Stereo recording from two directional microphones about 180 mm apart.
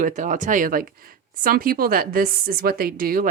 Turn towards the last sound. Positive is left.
turn(degrees=-50)  # may be behind; listen again after turning